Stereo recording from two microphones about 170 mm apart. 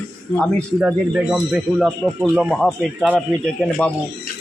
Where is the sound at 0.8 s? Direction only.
5° right (ahead or behind).